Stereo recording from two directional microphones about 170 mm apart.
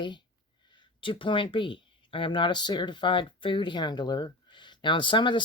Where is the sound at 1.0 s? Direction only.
30° left (ahead or behind).